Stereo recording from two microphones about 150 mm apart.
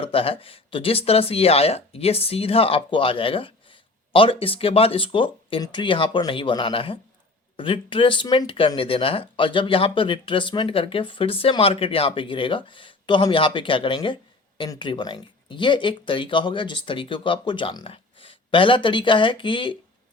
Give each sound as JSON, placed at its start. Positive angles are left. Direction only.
{"t": 0.0, "sound": "speech", "side_deg": 40}